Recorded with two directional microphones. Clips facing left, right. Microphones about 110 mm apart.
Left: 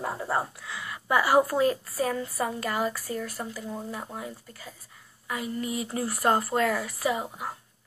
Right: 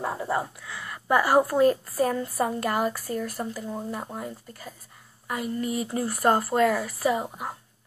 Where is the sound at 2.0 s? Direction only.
25° right (ahead or behind).